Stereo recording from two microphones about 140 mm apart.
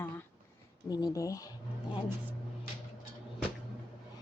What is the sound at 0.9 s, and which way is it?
Speech, 25° left (ahead or behind).